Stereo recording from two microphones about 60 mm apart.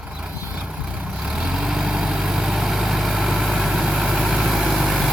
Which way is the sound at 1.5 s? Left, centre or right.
Centre.